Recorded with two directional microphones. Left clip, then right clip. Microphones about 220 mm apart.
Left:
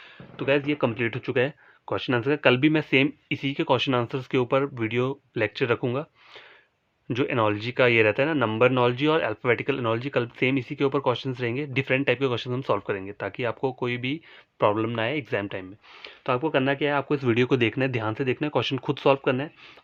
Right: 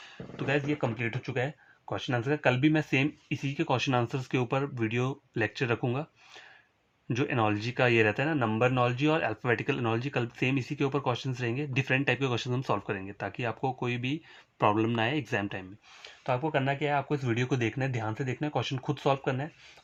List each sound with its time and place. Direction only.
0.3 s speech: 35° left (ahead or behind)
7.1 s speech: 25° left (ahead or behind)
16.0 s speech: 45° left (ahead or behind)